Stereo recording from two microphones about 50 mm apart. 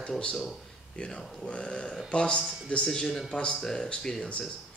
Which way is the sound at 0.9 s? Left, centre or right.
Centre.